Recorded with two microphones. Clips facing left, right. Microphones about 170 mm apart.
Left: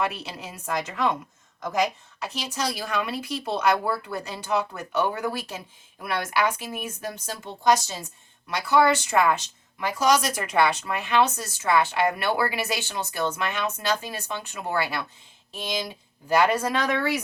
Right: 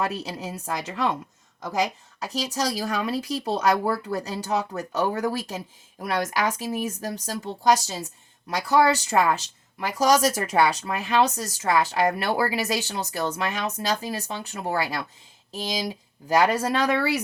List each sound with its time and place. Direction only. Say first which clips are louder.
0.0 s speech: right 1 dB; 40° right (ahead or behind)
2.1 s speech: right 3 dB; 40° right (ahead or behind)